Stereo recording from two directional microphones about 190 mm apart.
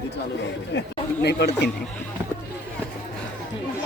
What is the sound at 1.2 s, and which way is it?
Speech, 60° left (ahead or behind).